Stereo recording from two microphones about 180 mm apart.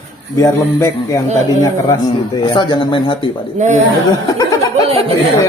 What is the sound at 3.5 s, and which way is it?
Speech, 40° right (ahead or behind).